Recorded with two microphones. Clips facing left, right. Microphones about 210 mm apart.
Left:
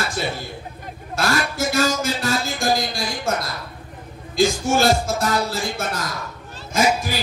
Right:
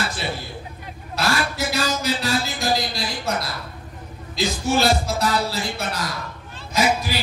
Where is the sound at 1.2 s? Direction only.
45° left (ahead or behind).